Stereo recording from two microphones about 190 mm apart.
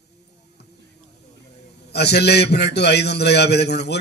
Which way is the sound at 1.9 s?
60° left (ahead or behind).